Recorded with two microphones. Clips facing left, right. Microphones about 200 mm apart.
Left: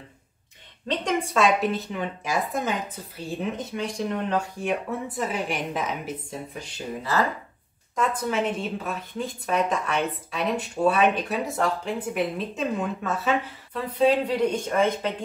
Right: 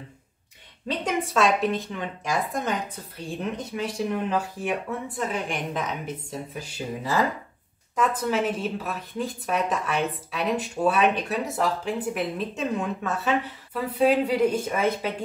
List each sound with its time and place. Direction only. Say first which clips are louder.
0.8 s speech: left 1 dB; 5° right (ahead or behind)
7.9 s speech: right 1 dB; centre (ahead or behind)